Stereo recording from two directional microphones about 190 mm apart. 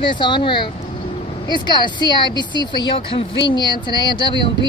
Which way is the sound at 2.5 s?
25° right (ahead or behind).